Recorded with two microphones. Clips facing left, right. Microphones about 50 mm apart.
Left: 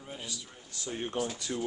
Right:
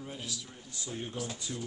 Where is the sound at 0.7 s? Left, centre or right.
Left.